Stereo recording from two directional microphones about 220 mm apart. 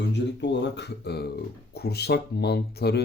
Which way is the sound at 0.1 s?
50° left (ahead or behind).